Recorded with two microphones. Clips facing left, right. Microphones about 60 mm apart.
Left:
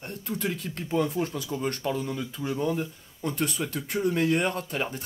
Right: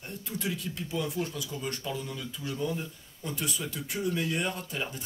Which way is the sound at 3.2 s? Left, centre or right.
Left.